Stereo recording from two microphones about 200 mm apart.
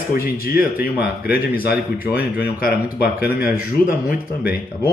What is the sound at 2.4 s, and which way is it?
Speech, 45° left (ahead or behind).